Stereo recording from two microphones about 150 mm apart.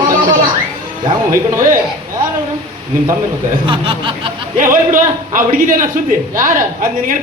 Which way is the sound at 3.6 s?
35° right (ahead or behind).